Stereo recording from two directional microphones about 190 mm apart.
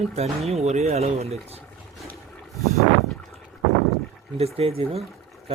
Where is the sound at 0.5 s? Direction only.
35° right (ahead or behind).